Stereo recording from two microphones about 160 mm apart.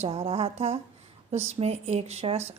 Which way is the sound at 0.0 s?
35° right (ahead or behind).